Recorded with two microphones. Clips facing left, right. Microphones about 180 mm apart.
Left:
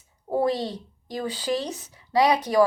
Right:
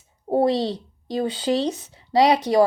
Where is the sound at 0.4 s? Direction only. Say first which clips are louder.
Right 4 dB; 30° right (ahead or behind).